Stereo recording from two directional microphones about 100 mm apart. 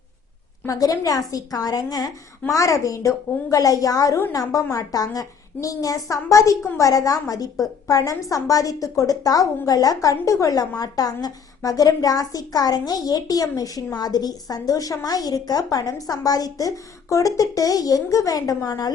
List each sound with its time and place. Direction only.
0.7 s a woman's voice: 35° left (ahead or behind)